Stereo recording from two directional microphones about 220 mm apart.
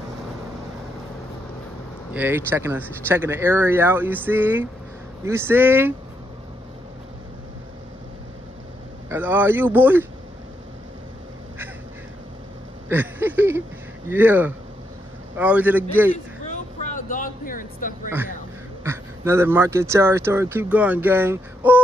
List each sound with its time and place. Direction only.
2.1 s speech: 10° right (ahead or behind)
9.1 s speech: 10° right (ahead or behind)
12.8 s a sound: 10° right (ahead or behind)
14.0 s speech: 10° right (ahead or behind)
16.5 s vehicle: 35° left (ahead or behind)
18.9 s speech: 10° right (ahead or behind)